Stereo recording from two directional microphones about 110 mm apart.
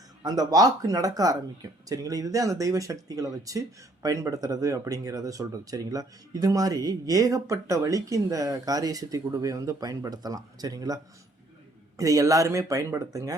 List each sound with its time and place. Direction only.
0.2 s speech: 35° right (ahead or behind)